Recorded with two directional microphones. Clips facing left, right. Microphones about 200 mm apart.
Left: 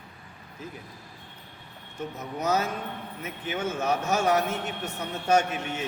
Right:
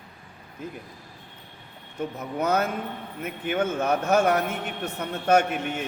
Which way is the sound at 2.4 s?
55° right (ahead or behind).